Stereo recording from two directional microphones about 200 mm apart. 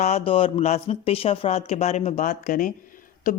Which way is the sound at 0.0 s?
30° left (ahead or behind).